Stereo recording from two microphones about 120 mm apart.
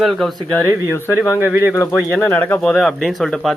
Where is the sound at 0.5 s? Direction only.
10° left (ahead or behind).